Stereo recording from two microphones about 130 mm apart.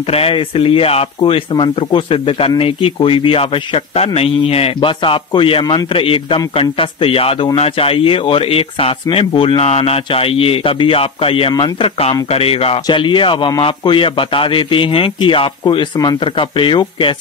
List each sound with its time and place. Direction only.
0.1 s speech: 45° left (ahead or behind)
12.8 s a man's voice: 40° left (ahead or behind)